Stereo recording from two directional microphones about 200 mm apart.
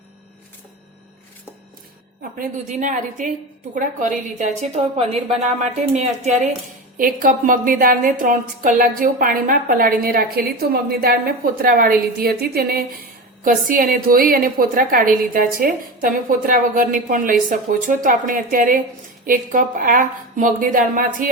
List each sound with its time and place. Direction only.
2.4 s a woman's voice: 40° right (ahead or behind)